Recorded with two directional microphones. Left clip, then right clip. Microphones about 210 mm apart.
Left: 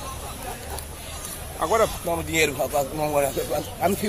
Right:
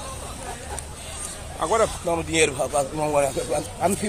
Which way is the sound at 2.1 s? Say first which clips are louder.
Right 1 dB; 30° right (ahead or behind).